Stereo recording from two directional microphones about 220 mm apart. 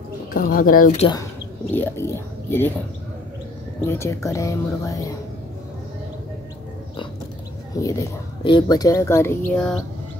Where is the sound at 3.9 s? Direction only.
15° left (ahead or behind).